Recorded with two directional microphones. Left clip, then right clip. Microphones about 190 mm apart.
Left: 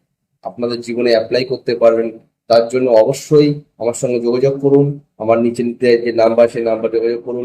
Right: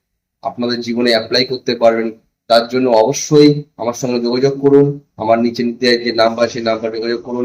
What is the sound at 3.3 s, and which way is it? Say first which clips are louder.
Speech: right 2 dB; 15° right (ahead or behind).